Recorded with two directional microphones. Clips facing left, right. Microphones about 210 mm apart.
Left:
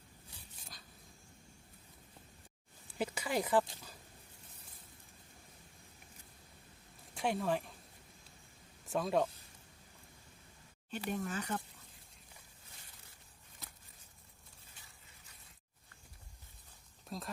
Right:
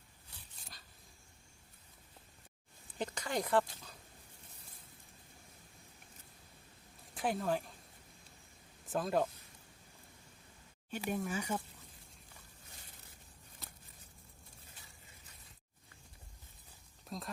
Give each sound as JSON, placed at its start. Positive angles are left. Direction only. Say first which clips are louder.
{"t": 3.0, "sound": "speech", "louder": "left 2 dB", "side_deg": 5}
{"t": 7.1, "sound": "speech", "louder": "even", "side_deg": 0}
{"t": 8.9, "sound": "speech", "louder": "left 1 dB", "side_deg": 0}
{"t": 10.9, "sound": "speech", "louder": "right 1 dB", "side_deg": -10}
{"t": 17.1, "sound": "a sound", "louder": "even", "side_deg": 5}